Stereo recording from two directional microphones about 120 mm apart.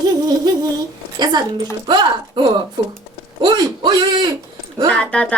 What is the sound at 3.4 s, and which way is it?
Speech, 35° right (ahead or behind).